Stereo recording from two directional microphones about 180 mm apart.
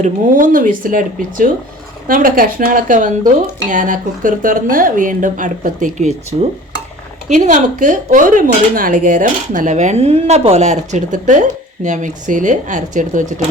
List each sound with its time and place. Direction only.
0.0 s speech: 50° right (ahead or behind)
7.3 s speech: 40° right (ahead or behind)